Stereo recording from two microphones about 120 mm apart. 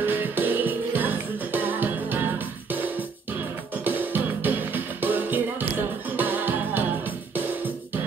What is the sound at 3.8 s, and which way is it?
Music, 15° right (ahead or behind).